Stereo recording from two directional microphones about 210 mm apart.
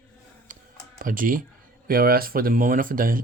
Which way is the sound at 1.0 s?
40° right (ahead or behind).